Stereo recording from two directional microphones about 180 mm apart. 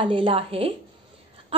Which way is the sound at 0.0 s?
30° right (ahead or behind).